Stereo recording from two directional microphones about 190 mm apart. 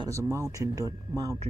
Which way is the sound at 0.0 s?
15° right (ahead or behind).